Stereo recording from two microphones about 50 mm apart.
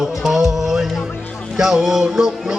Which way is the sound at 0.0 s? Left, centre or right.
Centre.